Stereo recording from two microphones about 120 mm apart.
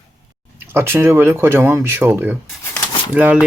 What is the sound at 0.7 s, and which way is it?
Speech, 20° right (ahead or behind).